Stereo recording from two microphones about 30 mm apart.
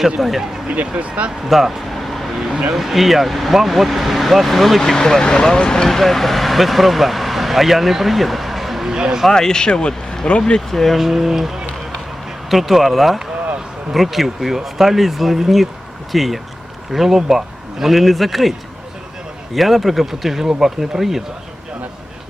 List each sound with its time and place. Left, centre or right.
0.2 s speech: centre
0.7 s speech: right
1.5 s speech: centre
2.0 s vehicle: centre
2.7 s speech: centre
4.8 s speech: centre
5.2 s speech: left
6.0 s speech: centre
8.9 s speech: right
9.3 s speech: left
10.7 s speech: centre
10.9 s speech: centre
19.5 s speech: centre